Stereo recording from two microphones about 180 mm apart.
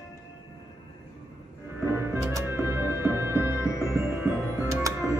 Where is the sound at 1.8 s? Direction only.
15° right (ahead or behind).